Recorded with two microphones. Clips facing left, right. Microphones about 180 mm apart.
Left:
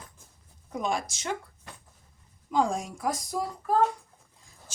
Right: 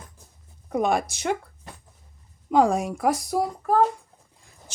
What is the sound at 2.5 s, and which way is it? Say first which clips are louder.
Speech: right 7 dB; 65° right (ahead or behind).